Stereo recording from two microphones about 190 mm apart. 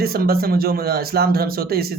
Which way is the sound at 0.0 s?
55° right (ahead or behind).